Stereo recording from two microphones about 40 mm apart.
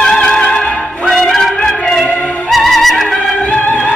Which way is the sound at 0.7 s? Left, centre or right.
Left.